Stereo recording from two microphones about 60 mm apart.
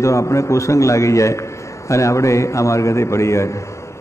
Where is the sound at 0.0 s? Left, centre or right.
Left.